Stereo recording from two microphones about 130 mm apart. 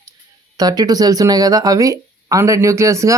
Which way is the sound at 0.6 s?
30° right (ahead or behind).